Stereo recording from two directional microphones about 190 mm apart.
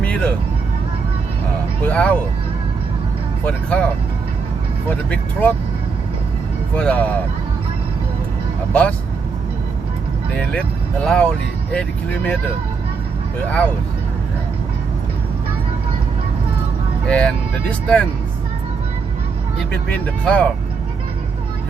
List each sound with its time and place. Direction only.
0.0 s vehicle: 5° left (ahead or behind)
1.8 s speech: 5° left (ahead or behind)
3.4 s speech: 5° left (ahead or behind)
4.9 s speech: 10° left (ahead or behind)
6.7 s speech: 5° left (ahead or behind)
8.7 s speech: 5° left (ahead or behind)
11.0 s speech: 5° left (ahead or behind)
17.1 s speech: 5° left (ahead or behind)
19.9 s speech: 5° left (ahead or behind)